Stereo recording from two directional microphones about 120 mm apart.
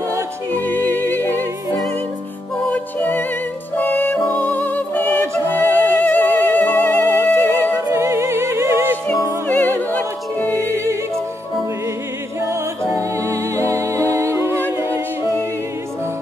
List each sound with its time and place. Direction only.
0.1 s music: 20° right (ahead or behind)
2.7 s music: 15° left (ahead or behind)
7.9 s music: 20° right (ahead or behind)
9.5 s opera: 15° left (ahead or behind)
10.5 s music: 25° right (ahead or behind)
12.9 s music: 25° right (ahead or behind)